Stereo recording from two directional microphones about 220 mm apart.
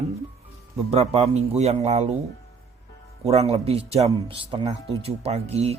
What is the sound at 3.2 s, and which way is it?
Speech, 30° right (ahead or behind).